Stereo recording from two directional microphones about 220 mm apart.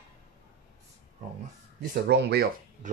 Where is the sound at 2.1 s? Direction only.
50° right (ahead or behind).